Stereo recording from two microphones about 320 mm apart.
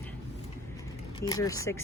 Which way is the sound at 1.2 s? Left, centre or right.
Centre.